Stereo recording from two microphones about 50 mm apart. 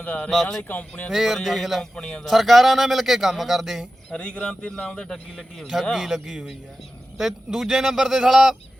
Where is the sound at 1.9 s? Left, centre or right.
Centre.